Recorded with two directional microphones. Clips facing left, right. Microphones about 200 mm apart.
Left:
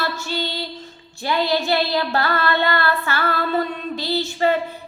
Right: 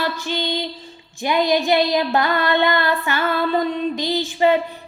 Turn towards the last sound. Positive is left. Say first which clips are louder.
# right 2 dB
turn(degrees=-15)  # may be behind; listen again after turning